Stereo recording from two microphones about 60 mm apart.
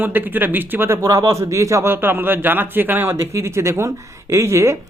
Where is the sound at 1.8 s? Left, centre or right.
Right.